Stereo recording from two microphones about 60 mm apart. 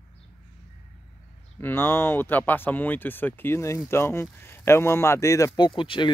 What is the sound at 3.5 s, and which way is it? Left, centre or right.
Speech, left.